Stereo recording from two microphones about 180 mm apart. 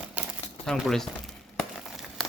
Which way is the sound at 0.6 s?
Centre (ahead or behind).